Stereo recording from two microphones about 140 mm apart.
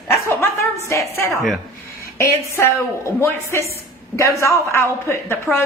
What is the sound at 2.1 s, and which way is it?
A woman's voice, 20° left (ahead or behind).